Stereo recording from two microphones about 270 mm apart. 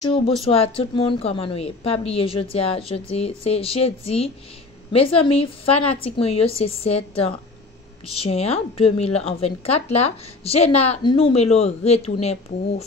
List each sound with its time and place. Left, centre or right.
0.5 s a woman's voice: left